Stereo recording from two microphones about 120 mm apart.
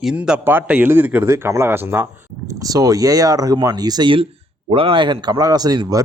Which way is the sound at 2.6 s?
30° right (ahead or behind).